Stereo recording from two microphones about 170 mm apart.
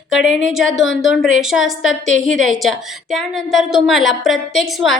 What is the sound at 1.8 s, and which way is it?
Speech, 90° left.